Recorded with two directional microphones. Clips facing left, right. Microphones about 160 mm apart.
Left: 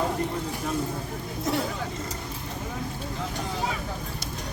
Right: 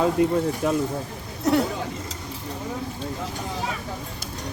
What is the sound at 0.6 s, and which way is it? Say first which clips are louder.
Speech: right 6 dB; 70° right (ahead or behind).